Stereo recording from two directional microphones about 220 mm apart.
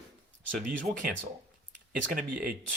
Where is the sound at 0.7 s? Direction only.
40° right (ahead or behind).